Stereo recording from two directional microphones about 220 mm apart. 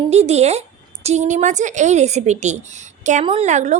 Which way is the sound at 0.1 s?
30° right (ahead or behind).